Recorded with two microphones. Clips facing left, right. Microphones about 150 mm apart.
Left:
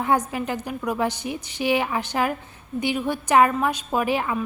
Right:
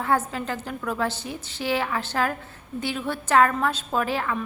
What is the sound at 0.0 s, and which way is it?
A woman's voice, 15° left (ahead or behind).